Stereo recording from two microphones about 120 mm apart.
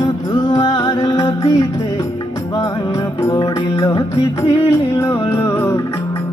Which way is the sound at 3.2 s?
25° left (ahead or behind).